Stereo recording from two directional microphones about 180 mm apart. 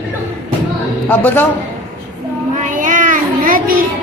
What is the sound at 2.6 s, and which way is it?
Child singing, 45° right (ahead or behind).